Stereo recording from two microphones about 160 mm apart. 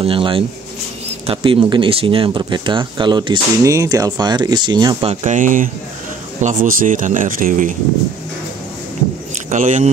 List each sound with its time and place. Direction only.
0.0 s speech: 35° right (ahead or behind)
5.0 s speech: 50° right (ahead or behind)
9.5 s speech: 50° right (ahead or behind)